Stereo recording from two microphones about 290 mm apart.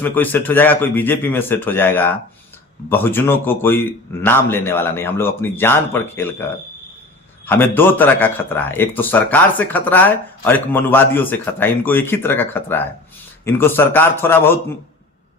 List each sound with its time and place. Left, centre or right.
0.0 s a man's voice: centre
7.4 s a man's voice: centre